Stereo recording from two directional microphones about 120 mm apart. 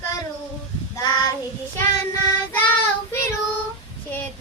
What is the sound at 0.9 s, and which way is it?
Child singing, 30° left (ahead or behind).